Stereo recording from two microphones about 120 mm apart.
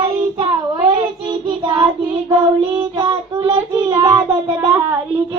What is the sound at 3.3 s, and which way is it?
Child singing, 45° right (ahead or behind).